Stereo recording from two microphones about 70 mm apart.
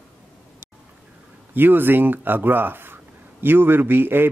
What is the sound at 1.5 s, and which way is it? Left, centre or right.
A man's voice, right.